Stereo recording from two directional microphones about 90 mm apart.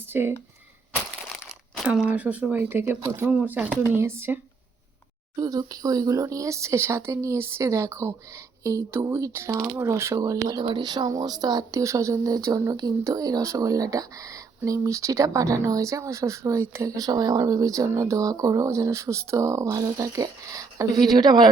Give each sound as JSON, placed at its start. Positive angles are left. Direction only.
{"t": 0.1, "sound": "speech", "side_deg": -25}
{"t": 1.9, "sound": "speech", "side_deg": -15}
{"t": 3.9, "sound": "speech", "side_deg": -25}
{"t": 5.4, "sound": "speech", "side_deg": -45}
{"t": 10.6, "sound": "speech", "side_deg": -60}
{"t": 17.1, "sound": "a man's voice", "side_deg": -50}